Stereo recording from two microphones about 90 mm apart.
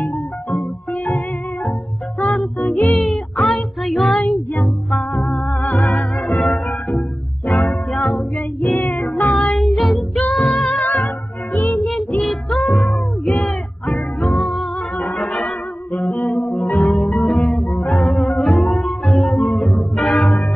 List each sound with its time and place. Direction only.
2.1 s music: centre (ahead or behind)
2.6 s music: 20° left (ahead or behind)
3.4 s child singing: centre (ahead or behind)
4.6 s music: centre (ahead or behind)
5.3 s music: 20° left (ahead or behind)
6.1 s music: centre (ahead or behind)
7.9 s music: 5° left (ahead or behind)
8.6 s music: 25° left (ahead or behind)
9.4 s music: 5° left (ahead or behind)
10.8 s music: 20° left (ahead or behind)
12.3 s music: centre (ahead or behind)
16.1 s music: 20° left (ahead or behind)
16.3 s music: 5° left (ahead or behind)